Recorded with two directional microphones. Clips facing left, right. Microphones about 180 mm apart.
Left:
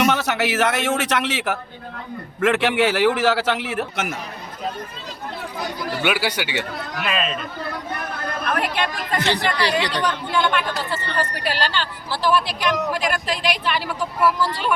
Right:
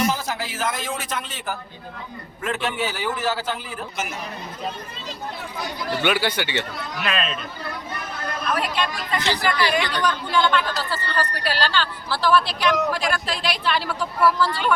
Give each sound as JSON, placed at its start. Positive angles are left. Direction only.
{"t": 0.0, "sound": "a man's voice", "side_deg": 75}
{"t": 6.0, "sound": "a man's voice", "side_deg": 10}
{"t": 7.9, "sound": "a sound", "side_deg": 60}
{"t": 9.4, "sound": "speech", "side_deg": 30}